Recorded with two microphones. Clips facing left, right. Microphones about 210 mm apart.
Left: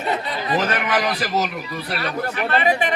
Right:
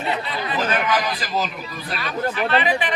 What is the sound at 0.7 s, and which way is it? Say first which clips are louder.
Speech: even; 70° left (ahead or behind).